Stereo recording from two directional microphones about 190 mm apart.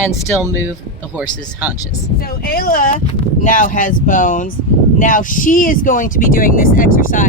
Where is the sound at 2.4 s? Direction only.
50° left (ahead or behind).